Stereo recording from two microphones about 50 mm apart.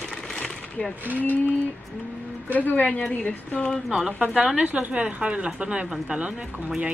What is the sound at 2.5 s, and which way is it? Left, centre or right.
A woman's voice, left.